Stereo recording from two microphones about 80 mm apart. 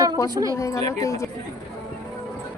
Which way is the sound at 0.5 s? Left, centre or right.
Left.